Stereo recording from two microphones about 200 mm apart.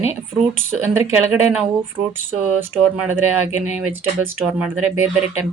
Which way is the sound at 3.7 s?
5° right (ahead or behind).